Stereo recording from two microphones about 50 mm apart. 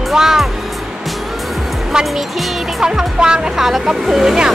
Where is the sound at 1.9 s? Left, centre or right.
Centre.